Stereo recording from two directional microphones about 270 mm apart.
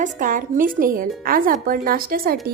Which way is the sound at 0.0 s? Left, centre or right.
Right.